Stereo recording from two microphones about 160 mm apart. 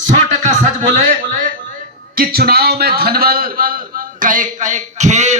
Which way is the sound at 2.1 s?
65° right (ahead or behind).